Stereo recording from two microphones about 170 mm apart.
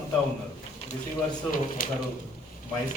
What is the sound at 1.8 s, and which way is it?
Speech, 55° left (ahead or behind).